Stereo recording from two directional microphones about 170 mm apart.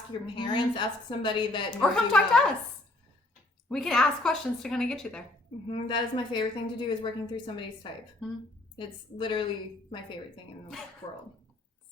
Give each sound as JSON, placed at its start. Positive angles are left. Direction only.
{"t": 0.3, "sound": "a woman's voice", "side_deg": 25}
{"t": 1.8, "sound": "a woman's voice", "side_deg": 5}
{"t": 3.7, "sound": "a woman's voice", "side_deg": 5}
{"t": 5.6, "sound": "a woman's voice", "side_deg": 30}
{"t": 8.2, "sound": "a woman's voice", "side_deg": 0}
{"t": 8.7, "sound": "a woman's voice", "side_deg": 30}
{"t": 11.0, "sound": "a woman's voice", "side_deg": 30}